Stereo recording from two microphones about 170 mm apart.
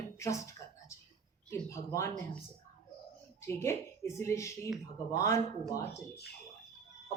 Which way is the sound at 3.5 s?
15° left (ahead or behind).